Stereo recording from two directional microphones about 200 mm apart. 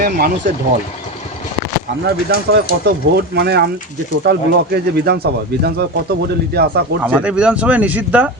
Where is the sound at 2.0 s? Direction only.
55° right (ahead or behind).